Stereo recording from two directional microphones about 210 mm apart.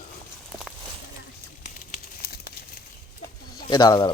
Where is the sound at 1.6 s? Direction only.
40° left (ahead or behind).